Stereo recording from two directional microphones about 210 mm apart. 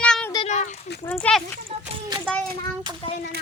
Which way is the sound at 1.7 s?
30° right (ahead or behind).